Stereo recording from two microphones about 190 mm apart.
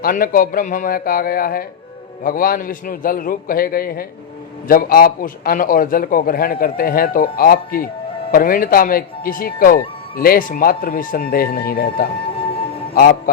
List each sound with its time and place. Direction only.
0.0 s speech: 50° left (ahead or behind)